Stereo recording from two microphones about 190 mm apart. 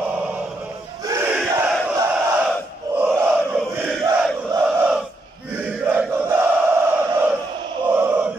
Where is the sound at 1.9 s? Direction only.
10° right (ahead or behind).